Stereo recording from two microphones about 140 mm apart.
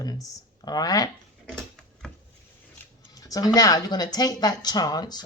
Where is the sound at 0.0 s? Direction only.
25° left (ahead or behind).